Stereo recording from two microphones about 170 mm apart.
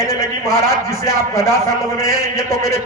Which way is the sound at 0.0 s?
15° left (ahead or behind).